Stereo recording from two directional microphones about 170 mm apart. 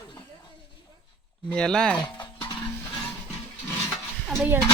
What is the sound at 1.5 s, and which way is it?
Speech, 5° left (ahead or behind).